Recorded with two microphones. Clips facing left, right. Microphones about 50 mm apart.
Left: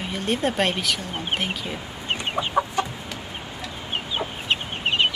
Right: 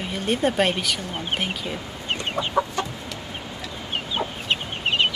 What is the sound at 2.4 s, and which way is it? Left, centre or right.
Chicken, left.